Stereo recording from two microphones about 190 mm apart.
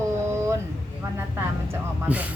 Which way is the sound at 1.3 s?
10° right (ahead or behind).